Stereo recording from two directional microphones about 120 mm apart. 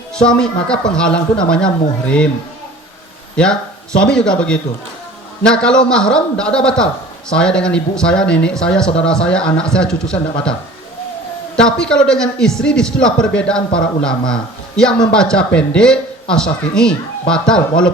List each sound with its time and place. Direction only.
0.2 s a man's voice: 5° left (ahead or behind)
3.3 s a man's voice: 5° left (ahead or behind)
11.5 s a man's voice: 5° left (ahead or behind)